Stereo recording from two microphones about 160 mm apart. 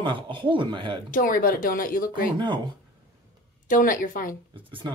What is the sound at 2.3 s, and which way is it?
Speech, 30° right (ahead or behind).